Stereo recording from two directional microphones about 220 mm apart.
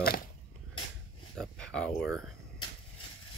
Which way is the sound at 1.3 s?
5° left (ahead or behind).